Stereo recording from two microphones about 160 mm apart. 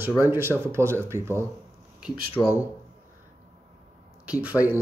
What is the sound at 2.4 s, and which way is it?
Speech, centre (ahead or behind).